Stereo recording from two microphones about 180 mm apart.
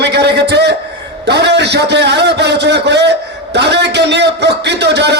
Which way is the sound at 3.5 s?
70° right (ahead or behind).